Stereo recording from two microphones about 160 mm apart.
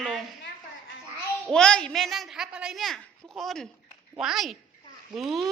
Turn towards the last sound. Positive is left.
turn(degrees=0)  # may be behind; listen again after turning